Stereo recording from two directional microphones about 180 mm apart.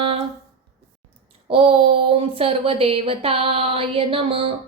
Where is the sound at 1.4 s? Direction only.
30° right (ahead or behind).